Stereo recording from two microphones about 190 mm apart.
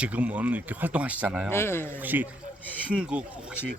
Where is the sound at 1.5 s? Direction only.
10° left (ahead or behind).